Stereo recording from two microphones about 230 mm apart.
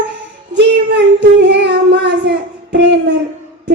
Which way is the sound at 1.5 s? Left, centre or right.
Right.